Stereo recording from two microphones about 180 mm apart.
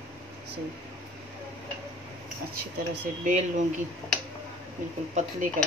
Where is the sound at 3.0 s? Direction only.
45° right (ahead or behind).